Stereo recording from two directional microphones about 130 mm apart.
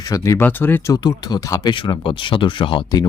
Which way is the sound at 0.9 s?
30° left (ahead or behind).